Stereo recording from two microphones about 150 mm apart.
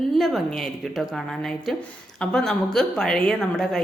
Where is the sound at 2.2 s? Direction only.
5° left (ahead or behind).